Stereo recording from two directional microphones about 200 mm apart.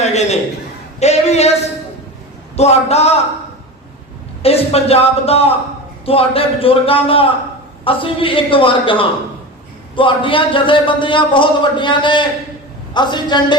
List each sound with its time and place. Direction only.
0.0 s chuckle: 35° left (ahead or behind)
0.9 s a man's voice: 35° left (ahead or behind)
2.6 s a man's voice: 30° left (ahead or behind)
4.4 s a man's voice: 30° left (ahead or behind)